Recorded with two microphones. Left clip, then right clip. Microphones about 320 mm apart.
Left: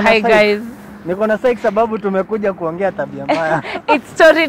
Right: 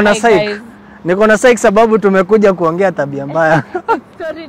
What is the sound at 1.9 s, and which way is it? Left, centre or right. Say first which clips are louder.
A man's voice: right 8 dB; right.